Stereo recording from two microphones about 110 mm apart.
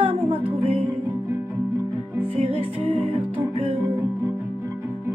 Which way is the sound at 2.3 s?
60° right (ahead or behind).